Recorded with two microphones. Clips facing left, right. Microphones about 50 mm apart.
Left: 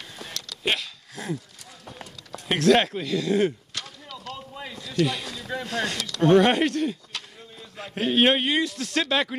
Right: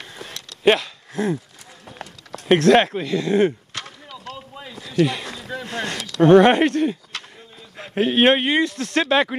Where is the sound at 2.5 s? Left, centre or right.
Right.